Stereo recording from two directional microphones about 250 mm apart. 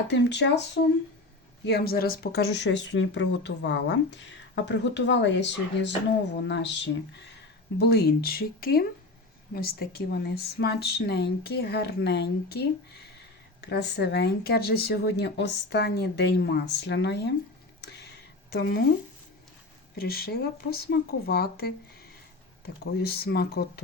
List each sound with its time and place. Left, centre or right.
0.1 s speech: left
7.8 s speech: left
17.7 s a sound: left
18.5 s speech: left
20.0 s speech: left